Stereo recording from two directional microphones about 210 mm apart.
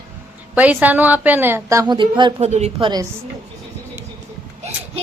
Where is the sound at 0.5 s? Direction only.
5° right (ahead or behind); by 2.7 s 30° right (ahead or behind).